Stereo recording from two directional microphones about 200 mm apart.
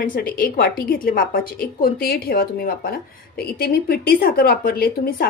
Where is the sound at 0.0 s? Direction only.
45° left (ahead or behind).